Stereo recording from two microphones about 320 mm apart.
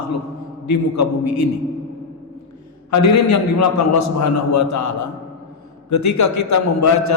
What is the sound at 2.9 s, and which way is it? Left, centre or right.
A man's voice, left.